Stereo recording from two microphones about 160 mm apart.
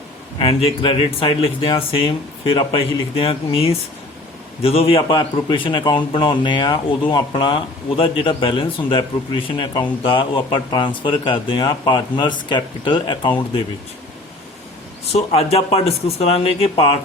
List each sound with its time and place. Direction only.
0.3 s a man's voice: 35° left (ahead or behind)
15.1 s a man's voice: 40° left (ahead or behind)